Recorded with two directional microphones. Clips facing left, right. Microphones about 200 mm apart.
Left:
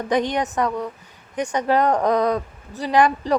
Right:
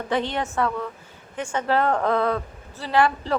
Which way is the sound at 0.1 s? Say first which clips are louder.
Left 4 dB; 15° left (ahead or behind).